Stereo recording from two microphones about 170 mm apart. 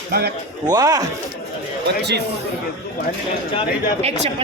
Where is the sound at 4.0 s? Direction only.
40° right (ahead or behind).